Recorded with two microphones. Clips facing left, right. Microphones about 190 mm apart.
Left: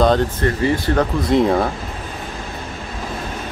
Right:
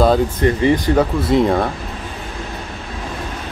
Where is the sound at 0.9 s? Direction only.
Centre (ahead or behind).